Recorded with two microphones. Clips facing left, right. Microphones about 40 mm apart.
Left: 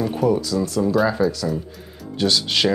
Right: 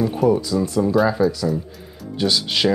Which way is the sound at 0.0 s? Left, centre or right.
Centre.